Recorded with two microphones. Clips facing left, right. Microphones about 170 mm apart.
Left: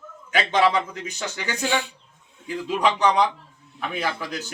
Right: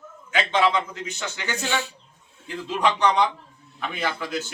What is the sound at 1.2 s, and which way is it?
Speech, 10° left (ahead or behind).